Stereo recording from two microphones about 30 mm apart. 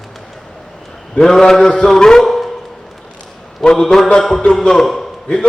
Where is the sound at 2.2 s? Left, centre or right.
Centre.